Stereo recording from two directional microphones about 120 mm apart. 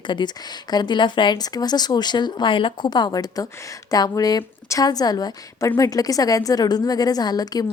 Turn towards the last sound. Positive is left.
turn(degrees=30)  # may be behind; listen again after turning